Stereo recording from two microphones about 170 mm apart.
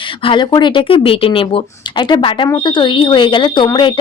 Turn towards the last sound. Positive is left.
turn(degrees=30)  # may be behind; listen again after turning